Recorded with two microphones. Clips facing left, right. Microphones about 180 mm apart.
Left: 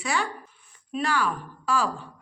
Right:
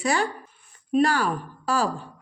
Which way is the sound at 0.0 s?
40° right (ahead or behind).